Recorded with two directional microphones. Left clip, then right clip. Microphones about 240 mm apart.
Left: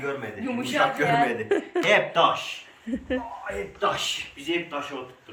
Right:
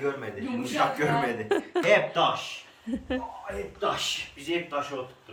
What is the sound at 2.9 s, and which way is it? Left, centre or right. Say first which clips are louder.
Speech: left 2 dB; centre.